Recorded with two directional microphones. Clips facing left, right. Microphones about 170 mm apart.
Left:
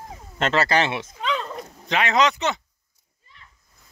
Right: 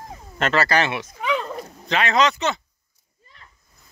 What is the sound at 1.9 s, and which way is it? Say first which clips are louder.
Speech: right 1 dB; 15° left (ahead or behind).